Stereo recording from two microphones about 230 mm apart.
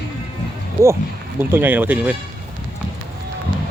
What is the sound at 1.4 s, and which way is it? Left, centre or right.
Speech, centre.